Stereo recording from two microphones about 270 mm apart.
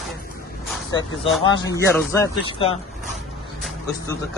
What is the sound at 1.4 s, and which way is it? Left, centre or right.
A man's voice, centre.